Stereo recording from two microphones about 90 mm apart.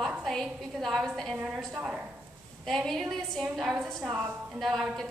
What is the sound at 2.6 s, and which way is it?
A woman's voice, 5° left (ahead or behind).